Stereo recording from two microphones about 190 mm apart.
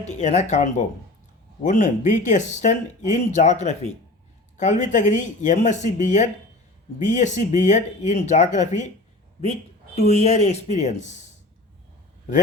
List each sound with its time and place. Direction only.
0.2 s speech: 35° left (ahead or behind)
10.0 s speech: 35° left (ahead or behind)